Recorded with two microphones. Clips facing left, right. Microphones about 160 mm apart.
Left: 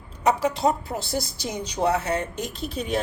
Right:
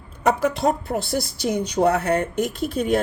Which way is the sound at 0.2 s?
50° right (ahead or behind).